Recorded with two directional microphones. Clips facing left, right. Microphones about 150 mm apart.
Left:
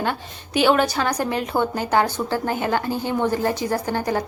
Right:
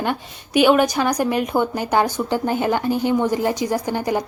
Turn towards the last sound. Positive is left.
turn(degrees=-15)  # may be behind; listen again after turning